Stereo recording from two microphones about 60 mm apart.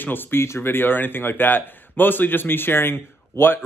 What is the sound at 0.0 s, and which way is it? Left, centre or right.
A man's voice, left.